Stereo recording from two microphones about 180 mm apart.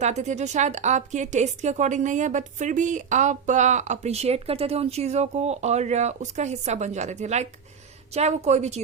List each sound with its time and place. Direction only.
0.0 s speech: 40° right (ahead or behind)